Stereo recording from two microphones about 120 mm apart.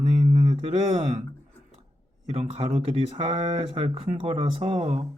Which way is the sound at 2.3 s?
55° right (ahead or behind).